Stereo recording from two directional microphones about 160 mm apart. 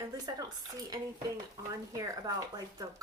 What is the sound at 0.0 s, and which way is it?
Speech, 25° right (ahead or behind).